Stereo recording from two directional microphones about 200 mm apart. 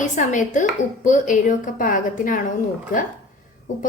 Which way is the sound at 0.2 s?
40° left (ahead or behind).